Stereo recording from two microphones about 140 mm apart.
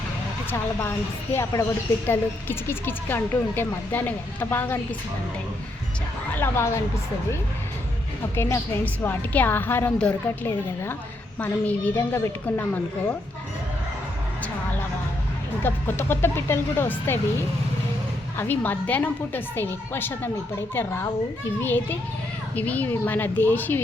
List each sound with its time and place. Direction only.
0.5 s speech: 15° left (ahead or behind)
6.3 s speech: 20° left (ahead or behind)
8.4 s speech: 20° left (ahead or behind)
15.6 s speech: 15° left (ahead or behind)
18.3 s speech: 15° left (ahead or behind)